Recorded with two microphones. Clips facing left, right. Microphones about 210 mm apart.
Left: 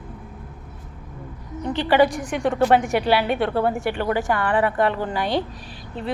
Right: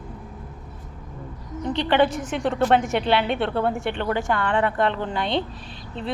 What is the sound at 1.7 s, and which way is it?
A woman's voice, 5° left (ahead or behind).